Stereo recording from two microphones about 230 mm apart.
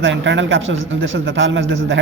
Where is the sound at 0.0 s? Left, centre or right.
Right.